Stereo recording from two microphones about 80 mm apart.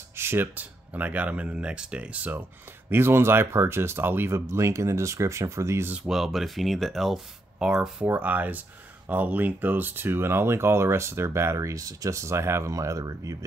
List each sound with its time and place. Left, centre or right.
0.1 s speech: right
2.9 s speech: right
6.0 s speech: centre
8.1 s speech: right